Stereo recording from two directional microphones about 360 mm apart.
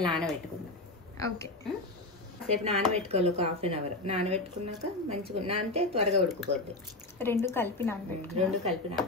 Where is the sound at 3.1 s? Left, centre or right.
Centre.